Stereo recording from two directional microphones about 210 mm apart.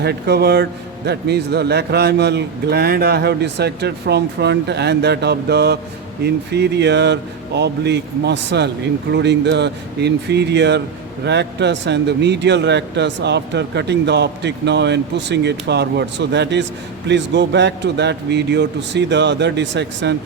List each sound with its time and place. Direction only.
0.0 s a man's voice: 50° right (ahead or behind)